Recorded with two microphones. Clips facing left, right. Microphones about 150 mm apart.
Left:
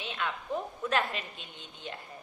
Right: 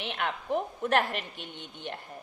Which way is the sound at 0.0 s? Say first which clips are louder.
Right 3 dB; 65° right (ahead or behind).